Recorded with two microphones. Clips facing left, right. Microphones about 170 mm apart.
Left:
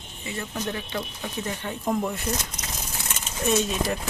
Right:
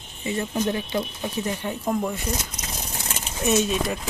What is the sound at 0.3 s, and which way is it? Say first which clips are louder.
Speech: right 6 dB; 25° right (ahead or behind).